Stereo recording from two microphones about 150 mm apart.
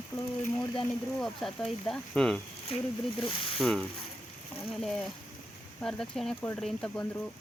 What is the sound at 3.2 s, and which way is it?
Speech, 35° left (ahead or behind).